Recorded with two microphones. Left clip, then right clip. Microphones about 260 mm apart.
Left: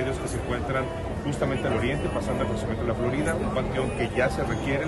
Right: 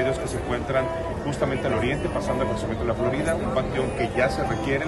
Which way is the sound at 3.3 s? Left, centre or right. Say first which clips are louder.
Right 3 dB; centre.